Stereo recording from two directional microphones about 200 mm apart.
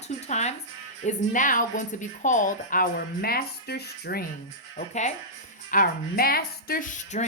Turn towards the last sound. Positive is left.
turn(degrees=35)  # may be behind; listen again after turning